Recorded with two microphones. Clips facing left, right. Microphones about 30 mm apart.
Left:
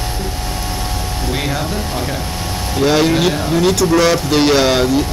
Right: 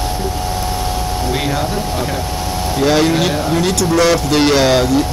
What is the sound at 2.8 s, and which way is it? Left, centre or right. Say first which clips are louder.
Speech: left 1 dB; centre.